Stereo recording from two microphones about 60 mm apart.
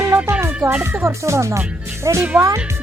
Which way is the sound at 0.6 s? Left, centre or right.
Right.